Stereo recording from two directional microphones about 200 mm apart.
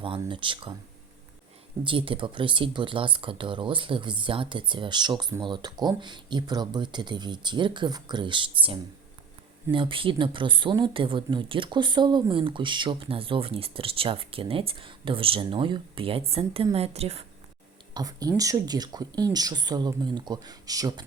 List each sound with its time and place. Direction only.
0.2 s speech: 25° right (ahead or behind)
1.8 s a woman's voice: 25° right (ahead or behind)
17.9 s speech: 20° right (ahead or behind)